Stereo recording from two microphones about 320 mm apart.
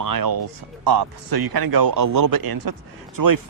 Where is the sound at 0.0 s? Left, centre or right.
Right.